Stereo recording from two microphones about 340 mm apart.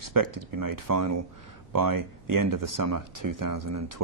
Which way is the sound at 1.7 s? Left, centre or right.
Right.